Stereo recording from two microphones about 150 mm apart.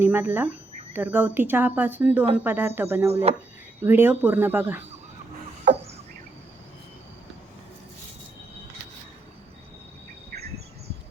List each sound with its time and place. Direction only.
0.0 s speech: 15° right (ahead or behind)
3.1 s speech: 45° right (ahead or behind)
3.8 s speech: 15° right (ahead or behind)